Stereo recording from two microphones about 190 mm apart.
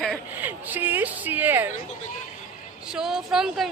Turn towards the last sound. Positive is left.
turn(degrees=0)  # may be behind; listen again after turning